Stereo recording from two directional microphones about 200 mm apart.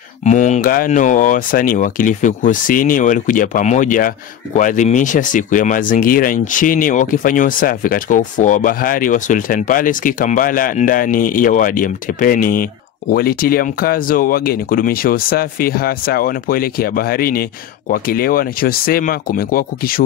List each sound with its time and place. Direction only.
0.2 s speech: 35° left (ahead or behind)